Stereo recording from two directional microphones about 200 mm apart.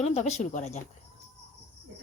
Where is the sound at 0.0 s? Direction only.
35° left (ahead or behind).